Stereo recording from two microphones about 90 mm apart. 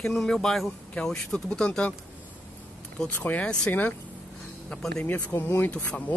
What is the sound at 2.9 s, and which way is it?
Speech, 15° left (ahead or behind).